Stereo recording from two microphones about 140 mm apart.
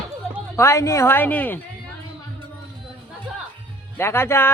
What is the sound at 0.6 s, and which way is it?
A woman's voice, 20° left (ahead or behind).